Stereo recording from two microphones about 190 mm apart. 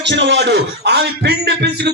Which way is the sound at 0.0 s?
70° right (ahead or behind).